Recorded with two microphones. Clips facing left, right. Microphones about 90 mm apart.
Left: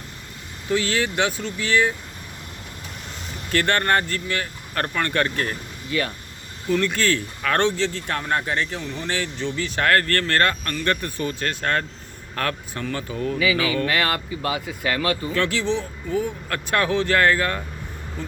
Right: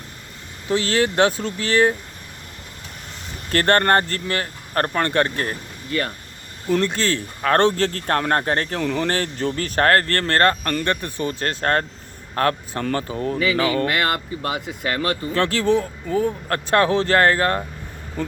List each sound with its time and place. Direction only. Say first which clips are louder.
0.7 s speech: right 3 dB; 35° right (ahead or behind)
3.5 s speech: right 3 dB; 40° right (ahead or behind)
6.8 s speech: even; 30° right (ahead or behind); by 8.8 s 50° right (ahead or behind)
8.8 s speech: right 9 dB; 70° right (ahead or behind)
9.0 s speech: right 4 dB; 45° right (ahead or behind)
10.8 s speech: right 1 dB; 25° right (ahead or behind)
11.3 s speech: right 4 dB; 35° right (ahead or behind)
18.2 s speech: right 7 dB; 50° right (ahead or behind)